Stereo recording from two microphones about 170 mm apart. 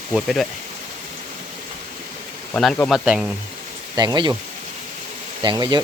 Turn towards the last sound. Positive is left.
turn(degrees=-25)  # may be behind; listen again after turning